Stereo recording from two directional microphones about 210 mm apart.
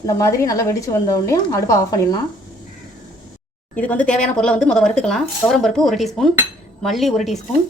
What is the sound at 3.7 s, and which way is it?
A woman's voice, 5° left (ahead or behind).